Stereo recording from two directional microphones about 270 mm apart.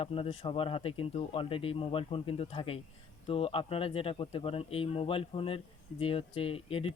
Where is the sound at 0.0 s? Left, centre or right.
Centre.